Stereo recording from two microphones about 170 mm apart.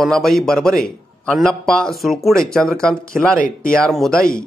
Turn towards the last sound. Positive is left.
turn(degrees=5)  # may be behind; listen again after turning